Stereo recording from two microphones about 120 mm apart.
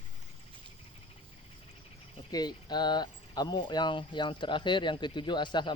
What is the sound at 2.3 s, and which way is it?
Speech, 35° left (ahead or behind).